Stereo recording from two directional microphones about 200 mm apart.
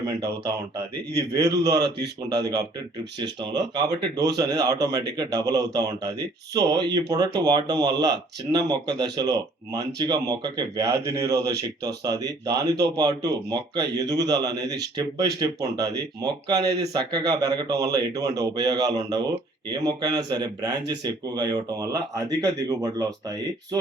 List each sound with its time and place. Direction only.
0.0 s speech: 15° right (ahead or behind)
1.5 s speech: 20° right (ahead or behind)